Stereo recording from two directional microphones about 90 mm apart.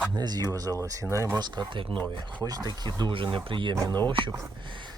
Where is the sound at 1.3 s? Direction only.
55° right (ahead or behind).